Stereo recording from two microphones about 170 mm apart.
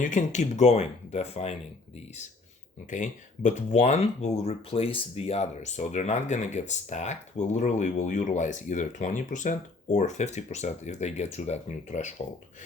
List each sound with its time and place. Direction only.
0.0 s speech: 45° left (ahead or behind)
2.9 s speech: 45° left (ahead or behind)